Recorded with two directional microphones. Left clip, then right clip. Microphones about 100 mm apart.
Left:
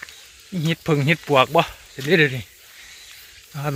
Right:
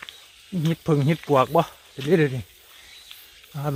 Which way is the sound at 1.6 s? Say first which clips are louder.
Left 3 dB; 20° right (ahead or behind).